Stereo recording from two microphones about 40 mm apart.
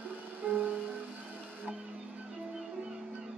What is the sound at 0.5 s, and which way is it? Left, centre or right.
Music, right.